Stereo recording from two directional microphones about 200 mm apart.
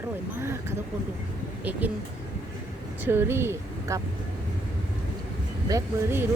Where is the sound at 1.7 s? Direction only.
10° right (ahead or behind).